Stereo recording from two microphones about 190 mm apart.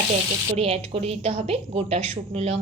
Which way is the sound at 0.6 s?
35° right (ahead or behind).